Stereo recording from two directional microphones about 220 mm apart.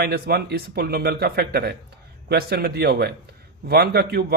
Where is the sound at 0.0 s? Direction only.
45° right (ahead or behind).